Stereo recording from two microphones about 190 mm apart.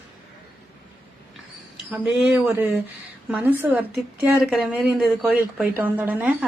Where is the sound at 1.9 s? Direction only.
5° right (ahead or behind).